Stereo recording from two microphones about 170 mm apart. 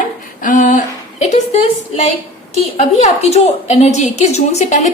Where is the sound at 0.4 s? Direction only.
50° left (ahead or behind).